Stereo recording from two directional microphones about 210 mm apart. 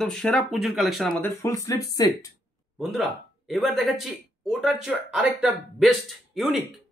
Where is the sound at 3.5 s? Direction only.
Centre (ahead or behind).